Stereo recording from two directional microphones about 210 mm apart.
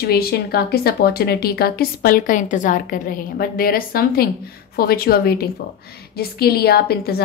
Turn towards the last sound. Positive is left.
turn(degrees=45)  # may be behind; listen again after turning